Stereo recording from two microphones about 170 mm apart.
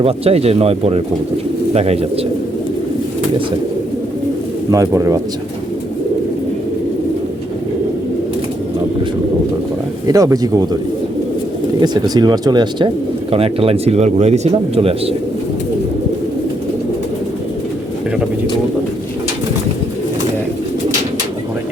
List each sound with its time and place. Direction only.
0.0 s speech: 35° right (ahead or behind)
4.7 s speech: 20° right (ahead or behind)
10.1 s speech: 20° right (ahead or behind)
11.8 s speech: 25° right (ahead or behind)
13.3 s speech: 35° right (ahead or behind)